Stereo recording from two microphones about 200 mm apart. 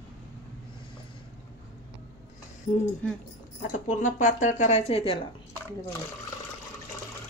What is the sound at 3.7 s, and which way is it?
Speech, 40° left (ahead or behind).